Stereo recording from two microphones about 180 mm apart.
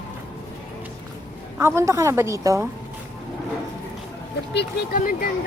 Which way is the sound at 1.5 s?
15° right (ahead or behind).